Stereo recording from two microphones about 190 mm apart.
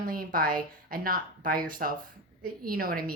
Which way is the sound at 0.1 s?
50° right (ahead or behind).